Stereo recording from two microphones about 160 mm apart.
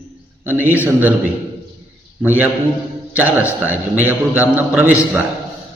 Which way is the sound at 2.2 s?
10° right (ahead or behind).